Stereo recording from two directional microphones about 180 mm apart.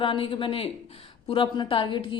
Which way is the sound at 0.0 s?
30° left (ahead or behind).